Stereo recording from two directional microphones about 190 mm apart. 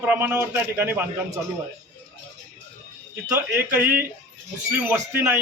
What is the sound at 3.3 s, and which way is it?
Speech, 10° right (ahead or behind).